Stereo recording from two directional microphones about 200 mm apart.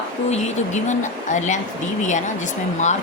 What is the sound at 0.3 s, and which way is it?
Speech, 35° left (ahead or behind).